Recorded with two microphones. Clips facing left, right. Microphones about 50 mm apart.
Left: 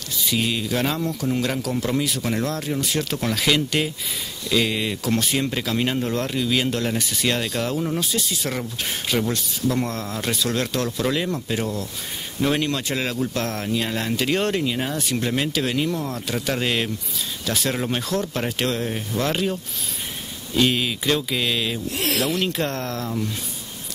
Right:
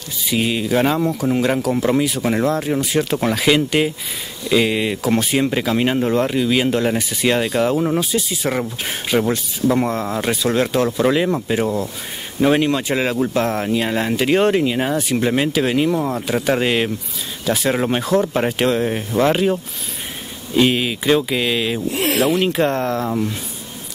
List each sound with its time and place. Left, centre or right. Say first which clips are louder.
0.3 s speech: right 5 dB; centre